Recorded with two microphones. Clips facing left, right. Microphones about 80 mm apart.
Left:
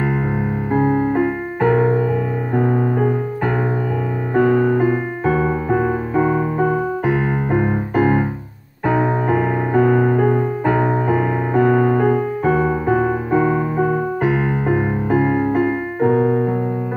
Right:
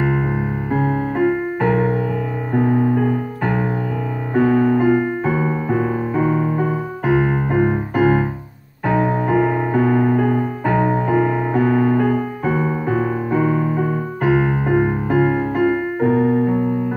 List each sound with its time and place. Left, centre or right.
0.7 s music: centre
4.4 s music: centre
5.7 s music: centre
7.1 s keyboard: centre
8.8 s music: centre
14.2 s music: centre
16.1 s keyboard: centre